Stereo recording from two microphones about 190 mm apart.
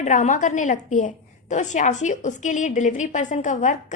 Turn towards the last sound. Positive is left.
turn(degrees=40)  # may be behind; listen again after turning